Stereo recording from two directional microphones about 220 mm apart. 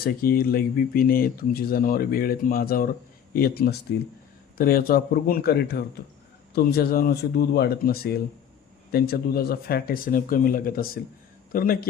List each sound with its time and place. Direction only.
0.0 s speech: 45° left (ahead or behind)